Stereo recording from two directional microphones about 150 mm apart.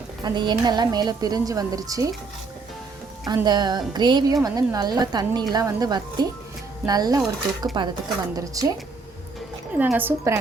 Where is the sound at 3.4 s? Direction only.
30° right (ahead or behind).